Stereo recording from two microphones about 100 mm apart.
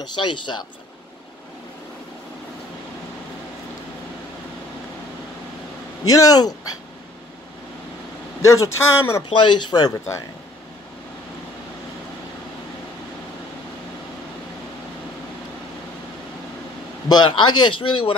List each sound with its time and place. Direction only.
0.1 s a man's voice: 50° left (ahead or behind)
6.0 s speech: 35° left (ahead or behind)
8.5 s speech: 30° left (ahead or behind)
9.3 s a man's voice: 50° left (ahead or behind)
17.1 s a man's voice: 50° left (ahead or behind)